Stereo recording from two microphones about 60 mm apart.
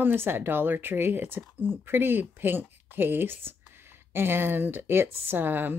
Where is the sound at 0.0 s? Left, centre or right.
Right.